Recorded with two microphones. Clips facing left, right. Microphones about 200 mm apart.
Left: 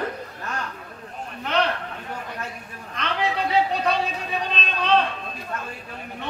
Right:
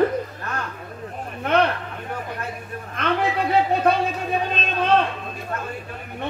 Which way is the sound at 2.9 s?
55° right (ahead or behind).